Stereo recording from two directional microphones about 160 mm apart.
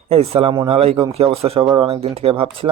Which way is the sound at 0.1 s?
35° right (ahead or behind).